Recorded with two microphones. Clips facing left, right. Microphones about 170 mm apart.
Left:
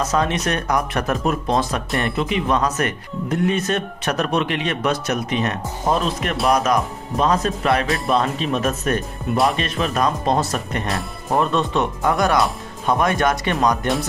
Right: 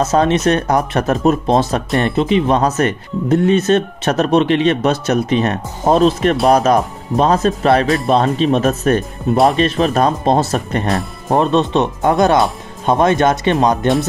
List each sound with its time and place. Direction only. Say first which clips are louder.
0.0 s speech: right 7 dB; 25° right (ahead or behind)